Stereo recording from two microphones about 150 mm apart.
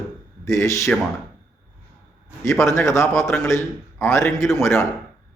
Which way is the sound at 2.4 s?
20° left (ahead or behind).